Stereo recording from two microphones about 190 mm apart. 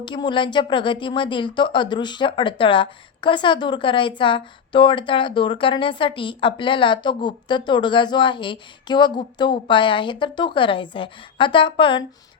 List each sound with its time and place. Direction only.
0.0 s speech: 25° left (ahead or behind)